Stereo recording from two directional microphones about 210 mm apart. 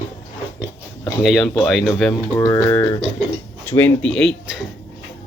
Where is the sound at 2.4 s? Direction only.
15° left (ahead or behind).